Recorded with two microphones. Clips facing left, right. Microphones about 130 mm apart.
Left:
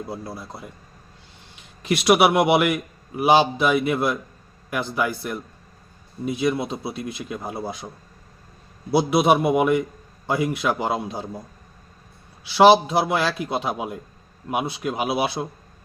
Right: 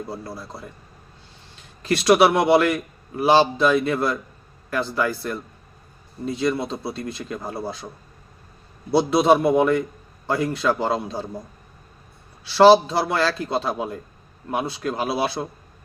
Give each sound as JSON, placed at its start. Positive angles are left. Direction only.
{"t": 0.1, "sound": "speech", "side_deg": 15}
{"t": 1.8, "sound": "speech", "side_deg": 15}
{"t": 8.9, "sound": "speech", "side_deg": 10}
{"t": 12.5, "sound": "speech", "side_deg": 15}